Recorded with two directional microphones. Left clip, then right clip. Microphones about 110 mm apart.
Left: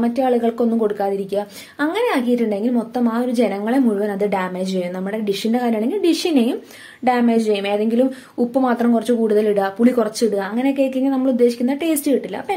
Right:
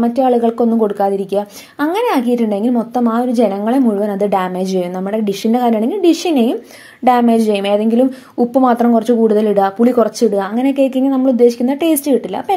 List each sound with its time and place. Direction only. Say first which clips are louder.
0.0 s a woman's voice: right 5 dB; 35° right (ahead or behind)
7.1 s a woman's voice: right 5 dB; 50° right (ahead or behind)